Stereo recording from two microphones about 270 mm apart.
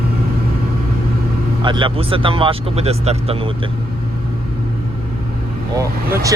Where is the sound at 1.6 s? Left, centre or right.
Centre.